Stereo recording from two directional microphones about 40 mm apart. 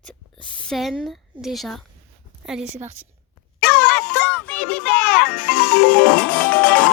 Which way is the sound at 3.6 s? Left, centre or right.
Left.